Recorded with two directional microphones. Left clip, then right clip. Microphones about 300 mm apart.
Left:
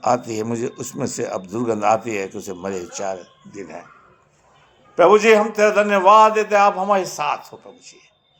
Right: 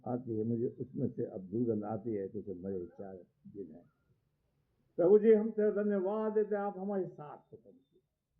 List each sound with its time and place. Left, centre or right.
0.0 s speech: left
4.9 s speech: left